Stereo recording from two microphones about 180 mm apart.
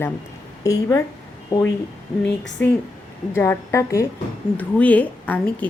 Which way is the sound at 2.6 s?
10° left (ahead or behind).